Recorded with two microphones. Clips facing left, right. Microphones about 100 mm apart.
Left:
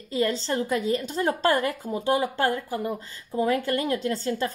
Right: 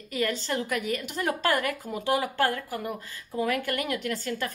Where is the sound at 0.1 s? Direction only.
25° left (ahead or behind).